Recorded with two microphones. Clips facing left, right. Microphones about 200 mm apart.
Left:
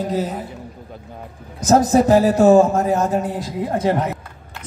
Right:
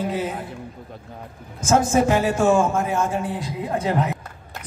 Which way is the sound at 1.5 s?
35° left (ahead or behind).